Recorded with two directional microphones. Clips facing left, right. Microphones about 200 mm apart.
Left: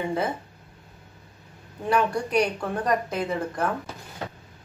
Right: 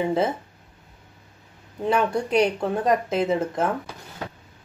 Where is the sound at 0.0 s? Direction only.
25° right (ahead or behind).